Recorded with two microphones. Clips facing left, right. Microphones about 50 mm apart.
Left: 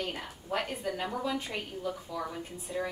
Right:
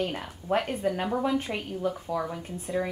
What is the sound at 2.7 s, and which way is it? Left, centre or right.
Speech, right.